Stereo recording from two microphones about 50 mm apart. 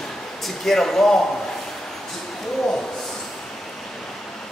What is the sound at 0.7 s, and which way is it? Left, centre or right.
Speech, centre.